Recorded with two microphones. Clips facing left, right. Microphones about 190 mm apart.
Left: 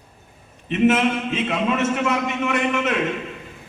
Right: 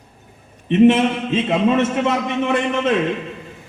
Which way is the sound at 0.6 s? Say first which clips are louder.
Right 5 dB; 30° right (ahead or behind).